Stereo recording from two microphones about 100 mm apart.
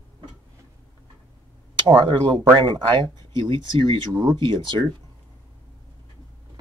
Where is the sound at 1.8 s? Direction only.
50° right (ahead or behind).